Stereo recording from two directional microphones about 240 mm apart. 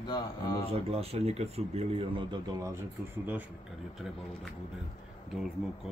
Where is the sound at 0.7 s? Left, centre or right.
Right.